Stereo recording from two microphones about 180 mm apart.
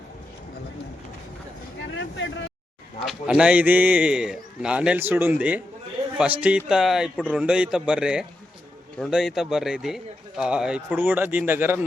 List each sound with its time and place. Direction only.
2.0 s vehicle: 90° left
3.1 s a man's voice: 5° right (ahead or behind)